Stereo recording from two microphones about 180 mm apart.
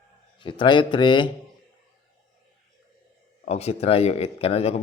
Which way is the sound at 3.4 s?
35° left (ahead or behind).